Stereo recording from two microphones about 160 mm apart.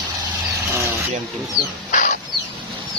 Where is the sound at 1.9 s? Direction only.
50° left (ahead or behind).